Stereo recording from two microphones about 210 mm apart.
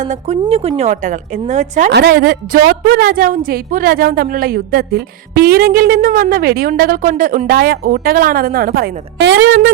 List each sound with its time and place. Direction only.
0.0 s speech: 35° right (ahead or behind)
1.9 s a woman's voice: 50° right (ahead or behind)